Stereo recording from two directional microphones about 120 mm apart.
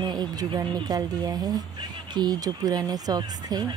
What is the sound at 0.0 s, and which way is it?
Speech, 35° right (ahead or behind).